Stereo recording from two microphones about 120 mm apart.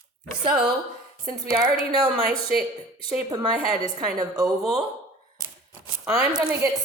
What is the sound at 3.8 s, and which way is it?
Speech, 35° right (ahead or behind).